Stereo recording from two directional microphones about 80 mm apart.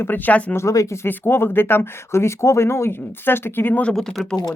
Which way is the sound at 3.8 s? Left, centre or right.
Centre.